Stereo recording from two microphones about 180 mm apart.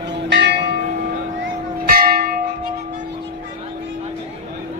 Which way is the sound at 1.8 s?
55° right (ahead or behind).